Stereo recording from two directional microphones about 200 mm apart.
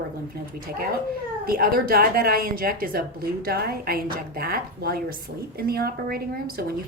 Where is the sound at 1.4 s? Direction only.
45° right (ahead or behind).